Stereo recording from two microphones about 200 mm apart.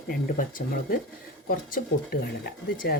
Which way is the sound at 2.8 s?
55° left (ahead or behind).